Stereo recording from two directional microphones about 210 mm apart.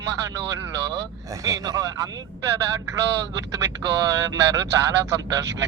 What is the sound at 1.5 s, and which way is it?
Speech, 20° right (ahead or behind).